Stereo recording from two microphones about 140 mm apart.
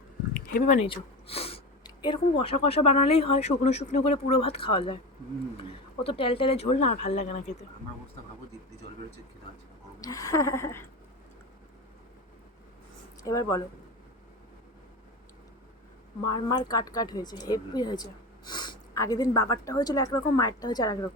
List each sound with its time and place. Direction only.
0.3 s a sound: 80° left
0.8 s speech: 45° left (ahead or behind)
1.8 s speech: 35° left (ahead or behind); by 7.6 s 55° left (ahead or behind)
10.0 s speech: 25° left (ahead or behind)
13.2 s speech: 25° left (ahead or behind)
16.2 s speech: 30° left (ahead or behind)